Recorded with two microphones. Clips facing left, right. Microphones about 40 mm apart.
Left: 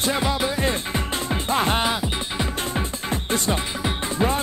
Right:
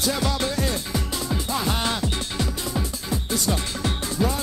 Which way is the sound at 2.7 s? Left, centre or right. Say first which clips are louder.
Left 2 dB; left.